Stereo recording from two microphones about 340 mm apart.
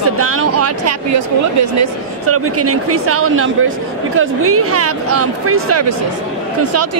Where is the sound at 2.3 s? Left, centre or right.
Right.